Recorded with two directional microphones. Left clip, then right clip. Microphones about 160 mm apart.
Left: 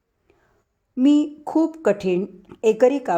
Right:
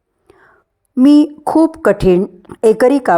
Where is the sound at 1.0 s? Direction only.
30° right (ahead or behind).